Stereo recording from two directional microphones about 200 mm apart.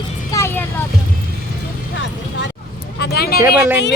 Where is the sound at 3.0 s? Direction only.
50° left (ahead or behind).